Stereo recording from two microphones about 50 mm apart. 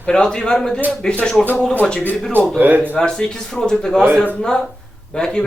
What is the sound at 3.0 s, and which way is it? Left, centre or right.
Speech, centre.